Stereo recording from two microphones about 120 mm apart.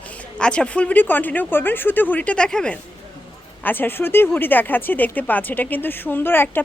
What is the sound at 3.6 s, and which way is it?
A woman's voice, 15° left (ahead or behind).